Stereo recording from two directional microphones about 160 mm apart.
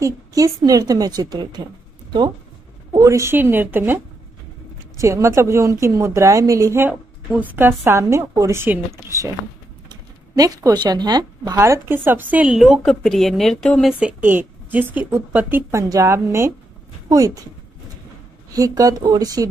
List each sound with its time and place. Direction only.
0.0 s a woman's voice: 20° right (ahead or behind)
2.9 s a woman's voice: 20° right (ahead or behind)
9.8 s a woman's voice: 25° right (ahead or behind); by 13.9 s 5° left (ahead or behind)
13.9 s a woman's voice: 10° right (ahead or behind)
18.5 s a woman's voice: 20° right (ahead or behind)